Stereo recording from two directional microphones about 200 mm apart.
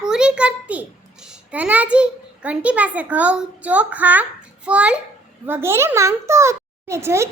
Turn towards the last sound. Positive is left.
turn(degrees=-15)  # may be behind; listen again after turning